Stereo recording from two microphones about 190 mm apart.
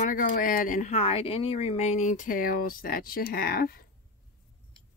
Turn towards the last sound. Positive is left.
turn(degrees=50)  # may be behind; listen again after turning